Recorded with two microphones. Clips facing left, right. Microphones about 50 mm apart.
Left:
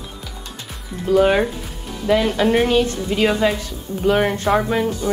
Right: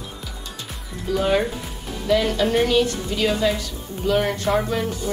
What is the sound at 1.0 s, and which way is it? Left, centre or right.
Speech, left.